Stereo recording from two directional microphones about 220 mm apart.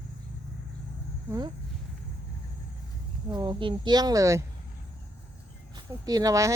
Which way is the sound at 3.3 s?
20° right (ahead or behind).